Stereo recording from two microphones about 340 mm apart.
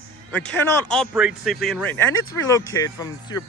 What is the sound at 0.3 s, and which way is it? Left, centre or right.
Speech, centre.